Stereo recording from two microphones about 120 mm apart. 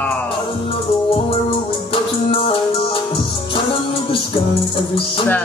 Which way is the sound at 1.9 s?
50° left (ahead or behind).